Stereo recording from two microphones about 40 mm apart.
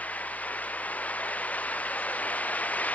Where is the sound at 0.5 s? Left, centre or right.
Left.